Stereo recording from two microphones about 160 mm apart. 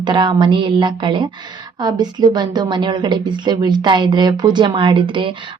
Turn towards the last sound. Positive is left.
turn(degrees=-30)  # may be behind; listen again after turning